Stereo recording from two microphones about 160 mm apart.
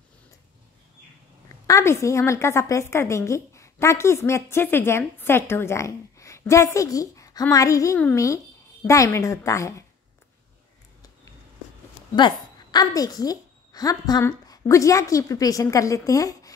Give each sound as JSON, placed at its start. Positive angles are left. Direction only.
{"t": 1.7, "sound": "a woman's voice", "side_deg": 20}
{"t": 12.2, "sound": "a woman's voice", "side_deg": 25}